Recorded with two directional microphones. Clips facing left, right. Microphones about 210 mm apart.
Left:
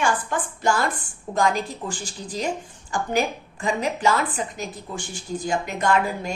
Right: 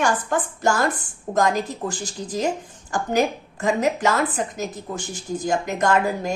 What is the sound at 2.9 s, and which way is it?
A woman's voice, 40° right (ahead or behind).